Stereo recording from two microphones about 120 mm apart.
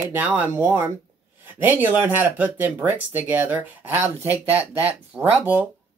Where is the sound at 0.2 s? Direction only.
15° right (ahead or behind).